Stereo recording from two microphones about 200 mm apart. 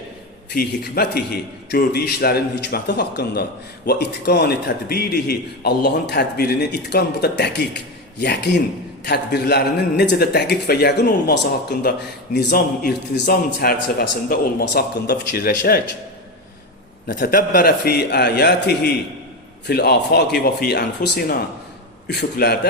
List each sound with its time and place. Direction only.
0.5 s a man's voice: 50° left (ahead or behind)
17.1 s a man's voice: 45° left (ahead or behind)